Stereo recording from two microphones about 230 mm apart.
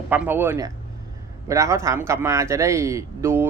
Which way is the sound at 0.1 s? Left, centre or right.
Centre.